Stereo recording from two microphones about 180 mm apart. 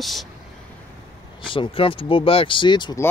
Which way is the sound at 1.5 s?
30° left (ahead or behind).